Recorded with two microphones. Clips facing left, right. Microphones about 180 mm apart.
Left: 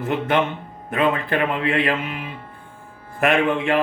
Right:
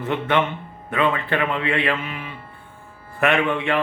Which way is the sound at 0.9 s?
45° left (ahead or behind).